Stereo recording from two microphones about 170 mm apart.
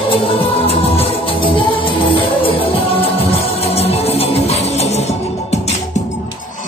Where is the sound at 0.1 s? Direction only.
30° left (ahead or behind).